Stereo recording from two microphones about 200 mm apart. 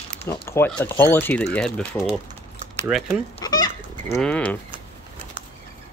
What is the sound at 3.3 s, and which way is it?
Goat, 20° left (ahead or behind).